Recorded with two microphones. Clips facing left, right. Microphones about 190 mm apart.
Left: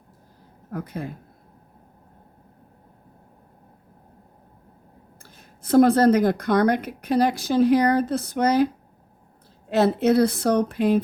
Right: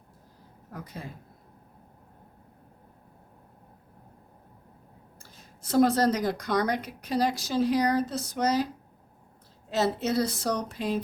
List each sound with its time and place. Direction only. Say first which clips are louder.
0.7 s speech: left 9 dB; 55° left (ahead or behind)
5.2 s speech: left 5 dB; 55° left (ahead or behind)